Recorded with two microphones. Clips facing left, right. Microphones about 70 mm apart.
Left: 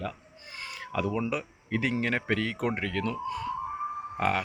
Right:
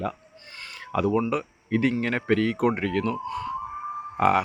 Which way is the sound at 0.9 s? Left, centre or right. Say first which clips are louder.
Right 6 dB; centre.